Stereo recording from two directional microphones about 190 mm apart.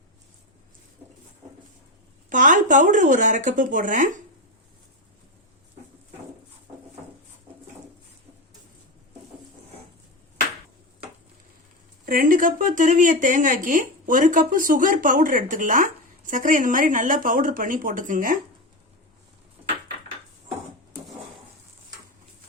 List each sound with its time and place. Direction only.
2.3 s speech: 45° right (ahead or behind)
12.0 s speech: 45° right (ahead or behind)